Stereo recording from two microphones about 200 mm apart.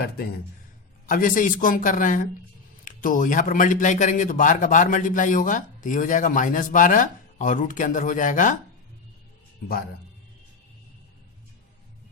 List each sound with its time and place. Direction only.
1.0 s a man's voice: 40° left (ahead or behind)